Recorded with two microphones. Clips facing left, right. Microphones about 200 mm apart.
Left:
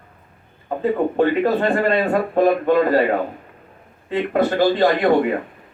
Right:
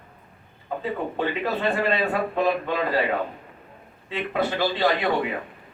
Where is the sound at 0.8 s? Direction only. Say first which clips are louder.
Left 10 dB; 50° left (ahead or behind).